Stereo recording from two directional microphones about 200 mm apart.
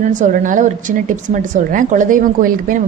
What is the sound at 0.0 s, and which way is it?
A woman's voice, 40° right (ahead or behind).